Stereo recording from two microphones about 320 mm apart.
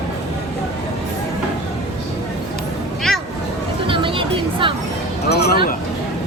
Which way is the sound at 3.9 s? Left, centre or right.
Centre.